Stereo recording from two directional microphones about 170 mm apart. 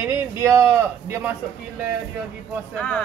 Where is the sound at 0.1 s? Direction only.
15° right (ahead or behind).